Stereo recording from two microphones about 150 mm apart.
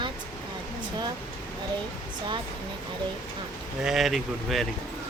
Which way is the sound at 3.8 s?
Centre (ahead or behind).